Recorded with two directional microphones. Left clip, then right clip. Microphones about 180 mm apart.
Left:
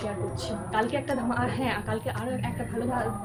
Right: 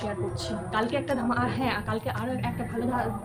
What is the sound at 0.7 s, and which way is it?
A woman's voice, 5° right (ahead or behind).